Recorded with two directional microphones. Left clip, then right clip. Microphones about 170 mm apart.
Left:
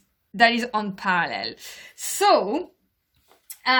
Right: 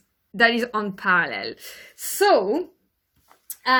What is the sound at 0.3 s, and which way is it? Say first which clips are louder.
Speech: even; 10° left (ahead or behind).